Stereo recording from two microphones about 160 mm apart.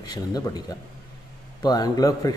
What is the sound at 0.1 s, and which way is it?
A man's voice, 25° left (ahead or behind).